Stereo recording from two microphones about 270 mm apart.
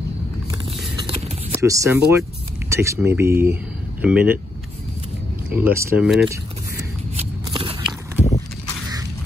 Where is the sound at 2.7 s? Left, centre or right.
Centre.